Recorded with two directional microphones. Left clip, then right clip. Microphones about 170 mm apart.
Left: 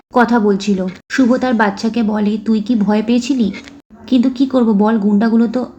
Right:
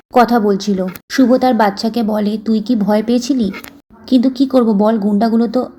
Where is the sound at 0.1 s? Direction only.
20° right (ahead or behind).